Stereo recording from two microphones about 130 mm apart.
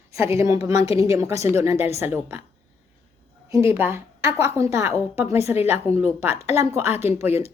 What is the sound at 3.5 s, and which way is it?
A woman's voice, 20° right (ahead or behind).